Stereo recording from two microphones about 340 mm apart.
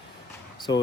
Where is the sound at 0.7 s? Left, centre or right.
Left.